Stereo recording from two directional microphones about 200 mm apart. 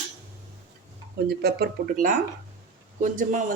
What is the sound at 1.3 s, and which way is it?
A man's voice, 50° right (ahead or behind).